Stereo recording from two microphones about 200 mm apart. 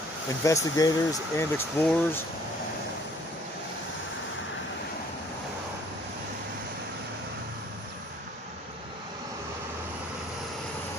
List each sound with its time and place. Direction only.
0.4 s speech: 15° left (ahead or behind)